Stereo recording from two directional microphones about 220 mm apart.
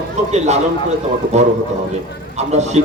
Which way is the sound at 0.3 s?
30° right (ahead or behind).